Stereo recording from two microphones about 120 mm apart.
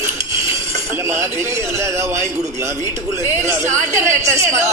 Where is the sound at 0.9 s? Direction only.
20° right (ahead or behind).